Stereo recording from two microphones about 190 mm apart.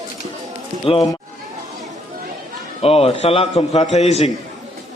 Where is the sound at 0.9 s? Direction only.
30° left (ahead or behind).